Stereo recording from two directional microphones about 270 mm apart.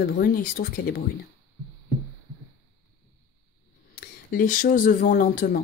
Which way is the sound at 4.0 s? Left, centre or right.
Left.